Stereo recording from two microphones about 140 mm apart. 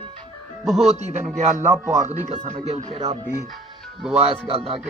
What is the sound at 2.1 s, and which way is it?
Speech, 55° right (ahead or behind).